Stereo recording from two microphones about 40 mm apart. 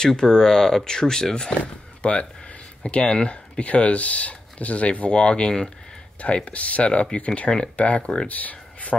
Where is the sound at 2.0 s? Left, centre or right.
Left.